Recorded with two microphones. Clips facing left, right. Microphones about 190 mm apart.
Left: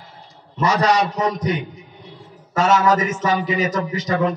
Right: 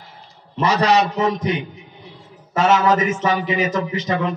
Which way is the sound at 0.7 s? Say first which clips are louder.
Right 1 dB; 25° right (ahead or behind).